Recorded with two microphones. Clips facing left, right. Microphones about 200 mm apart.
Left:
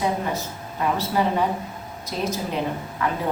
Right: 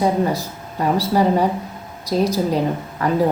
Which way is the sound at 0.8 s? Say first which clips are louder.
Right 5 dB; 40° right (ahead or behind).